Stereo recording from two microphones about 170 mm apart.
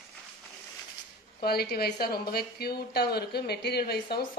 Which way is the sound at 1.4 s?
65° left (ahead or behind).